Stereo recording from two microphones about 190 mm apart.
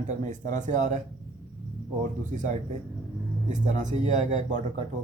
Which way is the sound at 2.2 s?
40° right (ahead or behind).